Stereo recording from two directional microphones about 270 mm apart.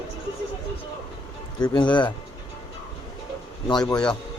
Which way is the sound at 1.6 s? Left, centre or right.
Centre.